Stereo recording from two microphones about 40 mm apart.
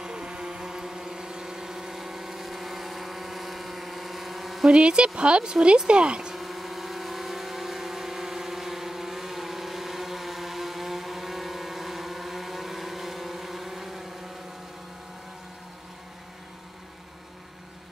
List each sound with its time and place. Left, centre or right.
0.0 s vehicle: centre
4.6 s speech: right
6.3 s vehicle: centre